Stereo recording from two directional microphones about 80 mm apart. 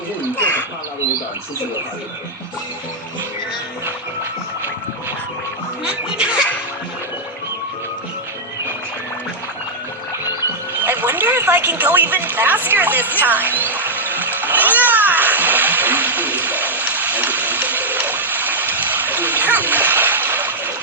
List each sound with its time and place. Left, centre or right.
5.8 s music: centre
10.8 s speech: right
14.3 s splash: right